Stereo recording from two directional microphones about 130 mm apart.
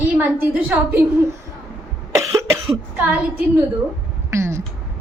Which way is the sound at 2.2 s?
20° right (ahead or behind).